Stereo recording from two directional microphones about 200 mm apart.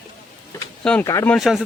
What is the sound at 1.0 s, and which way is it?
Speech, 15° left (ahead or behind).